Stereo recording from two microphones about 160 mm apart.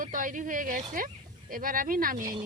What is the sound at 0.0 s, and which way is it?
Speech, 55° right (ahead or behind).